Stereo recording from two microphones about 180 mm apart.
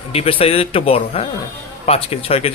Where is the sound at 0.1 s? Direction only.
30° left (ahead or behind).